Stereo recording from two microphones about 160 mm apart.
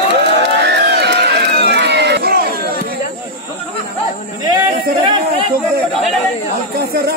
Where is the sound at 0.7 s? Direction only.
90° right.